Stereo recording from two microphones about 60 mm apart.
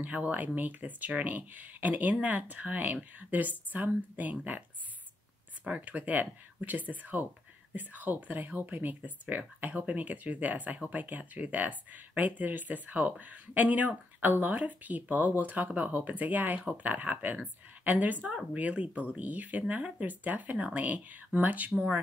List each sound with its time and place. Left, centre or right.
0.0 s speech: right